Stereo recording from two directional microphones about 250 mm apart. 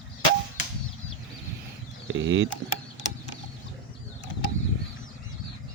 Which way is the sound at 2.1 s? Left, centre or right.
Right.